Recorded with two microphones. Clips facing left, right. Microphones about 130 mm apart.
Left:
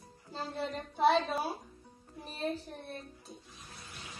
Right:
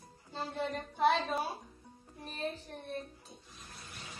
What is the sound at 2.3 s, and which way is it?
Speech, 35° left (ahead or behind).